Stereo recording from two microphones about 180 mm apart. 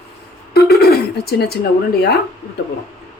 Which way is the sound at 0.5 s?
60° left (ahead or behind).